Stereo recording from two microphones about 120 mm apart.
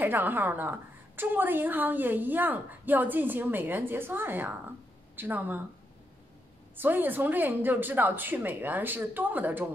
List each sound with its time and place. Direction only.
0.0 s a woman's voice: 15° right (ahead or behind)
6.8 s a woman's voice: 15° right (ahead or behind)